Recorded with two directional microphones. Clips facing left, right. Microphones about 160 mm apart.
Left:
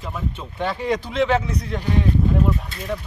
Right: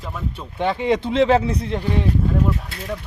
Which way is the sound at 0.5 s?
20° right (ahead or behind).